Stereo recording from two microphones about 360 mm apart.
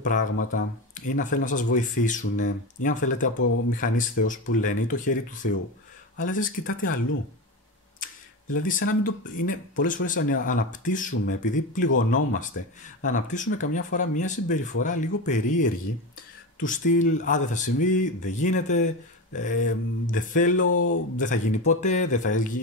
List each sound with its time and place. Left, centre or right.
0.0 s speech: left
8.6 s speech: left
20.6 s speech: left
21.2 s speech: left